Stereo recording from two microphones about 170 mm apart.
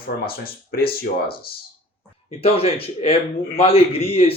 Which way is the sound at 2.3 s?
35° left (ahead or behind).